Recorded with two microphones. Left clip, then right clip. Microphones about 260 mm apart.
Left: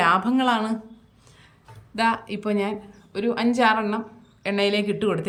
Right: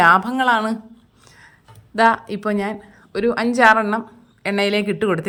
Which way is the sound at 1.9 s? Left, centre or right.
Centre.